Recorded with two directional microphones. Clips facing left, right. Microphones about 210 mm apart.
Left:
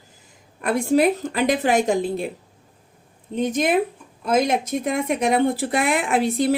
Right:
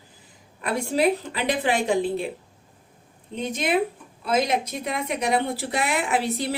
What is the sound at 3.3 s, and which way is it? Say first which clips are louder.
Speech: left 4 dB; 50° left (ahead or behind).